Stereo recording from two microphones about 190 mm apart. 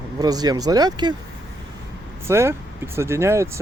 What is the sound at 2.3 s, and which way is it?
Speech, 15° right (ahead or behind).